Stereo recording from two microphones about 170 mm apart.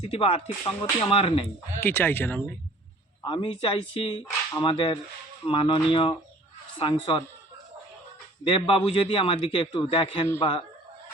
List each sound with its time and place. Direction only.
0.0 s a man's voice: 35° left (ahead or behind)
1.8 s speech: 10° left (ahead or behind)
3.2 s a man's voice: 30° left (ahead or behind)
8.4 s a man's voice: 30° left (ahead or behind)